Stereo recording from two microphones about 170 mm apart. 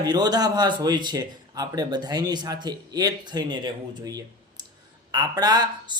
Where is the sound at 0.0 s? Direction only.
25° right (ahead or behind).